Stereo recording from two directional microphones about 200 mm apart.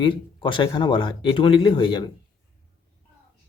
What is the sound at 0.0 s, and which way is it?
Speech, 25° left (ahead or behind).